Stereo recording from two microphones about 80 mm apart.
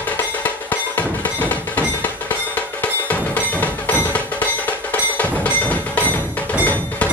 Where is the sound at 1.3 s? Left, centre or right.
Centre.